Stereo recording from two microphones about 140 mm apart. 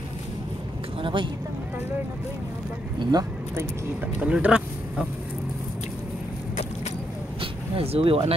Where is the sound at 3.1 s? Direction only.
15° right (ahead or behind).